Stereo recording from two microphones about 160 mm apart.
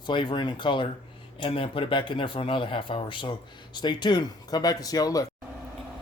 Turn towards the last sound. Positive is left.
turn(degrees=25)  # may be behind; listen again after turning